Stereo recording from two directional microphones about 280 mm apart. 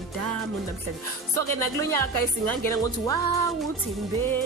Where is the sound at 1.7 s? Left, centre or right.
Centre.